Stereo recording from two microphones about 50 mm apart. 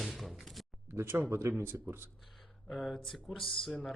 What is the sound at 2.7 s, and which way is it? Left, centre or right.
Speech, centre.